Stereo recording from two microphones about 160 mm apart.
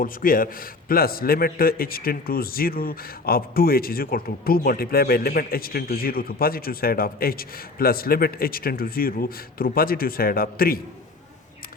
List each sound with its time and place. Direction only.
0.0 s a man's voice: 60° left (ahead or behind)